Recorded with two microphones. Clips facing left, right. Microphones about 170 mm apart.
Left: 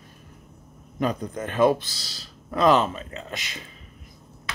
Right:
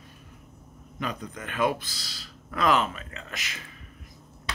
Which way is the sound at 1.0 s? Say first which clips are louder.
Left 8 dB; 40° left (ahead or behind).